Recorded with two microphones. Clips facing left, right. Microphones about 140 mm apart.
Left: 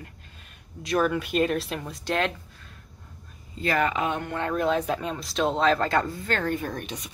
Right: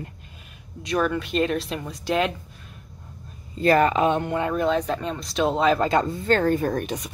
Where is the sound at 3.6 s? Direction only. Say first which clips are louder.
Right 7 dB; 35° right (ahead or behind).